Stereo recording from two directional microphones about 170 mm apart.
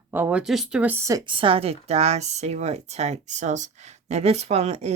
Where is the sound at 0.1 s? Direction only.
10° right (ahead or behind).